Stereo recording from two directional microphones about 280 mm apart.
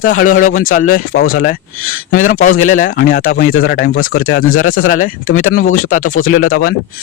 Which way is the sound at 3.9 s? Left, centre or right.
Left.